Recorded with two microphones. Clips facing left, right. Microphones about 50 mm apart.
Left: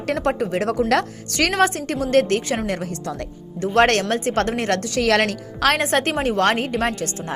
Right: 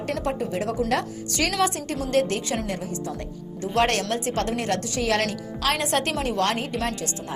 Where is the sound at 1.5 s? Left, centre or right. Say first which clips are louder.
Left 6 dB; left.